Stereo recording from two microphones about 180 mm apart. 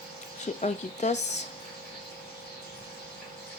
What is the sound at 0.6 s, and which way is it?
Speech, 40° left (ahead or behind).